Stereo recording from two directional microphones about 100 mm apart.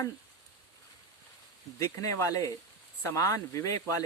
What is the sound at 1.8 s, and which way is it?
Speech, 30° left (ahead or behind).